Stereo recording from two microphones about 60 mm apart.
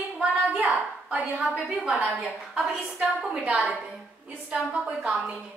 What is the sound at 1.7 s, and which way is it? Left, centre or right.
Speech, centre.